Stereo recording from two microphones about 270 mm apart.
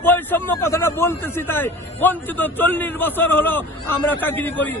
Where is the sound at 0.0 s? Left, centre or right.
Centre.